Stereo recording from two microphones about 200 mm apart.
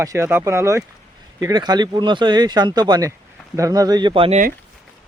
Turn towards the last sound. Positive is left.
turn(degrees=-30)  # may be behind; listen again after turning